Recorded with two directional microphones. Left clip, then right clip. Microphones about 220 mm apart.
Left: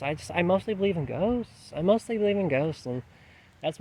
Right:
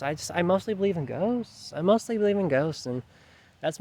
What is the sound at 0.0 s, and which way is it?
Speech, 20° right (ahead or behind).